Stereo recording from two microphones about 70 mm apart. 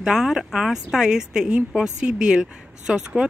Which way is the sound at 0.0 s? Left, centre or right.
Centre.